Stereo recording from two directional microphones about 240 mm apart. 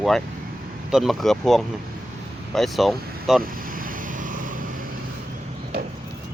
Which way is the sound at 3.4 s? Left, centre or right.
Right.